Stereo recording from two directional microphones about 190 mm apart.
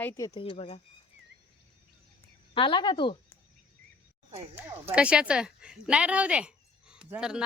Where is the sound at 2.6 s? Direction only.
25° left (ahead or behind).